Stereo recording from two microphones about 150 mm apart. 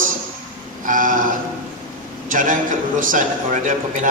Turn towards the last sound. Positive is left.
turn(degrees=-60)  # may be behind; listen again after turning